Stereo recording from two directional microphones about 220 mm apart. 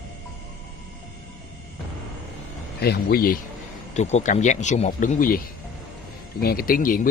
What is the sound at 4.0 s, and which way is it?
Speech, 30° left (ahead or behind).